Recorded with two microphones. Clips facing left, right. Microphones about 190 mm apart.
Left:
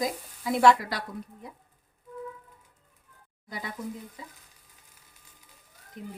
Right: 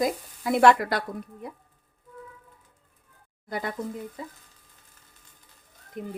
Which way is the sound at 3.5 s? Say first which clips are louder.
Right 7 dB; 55° right (ahead or behind).